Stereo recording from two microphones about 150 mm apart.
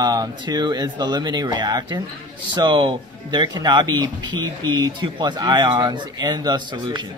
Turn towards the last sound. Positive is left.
turn(degrees=-30)  # may be behind; listen again after turning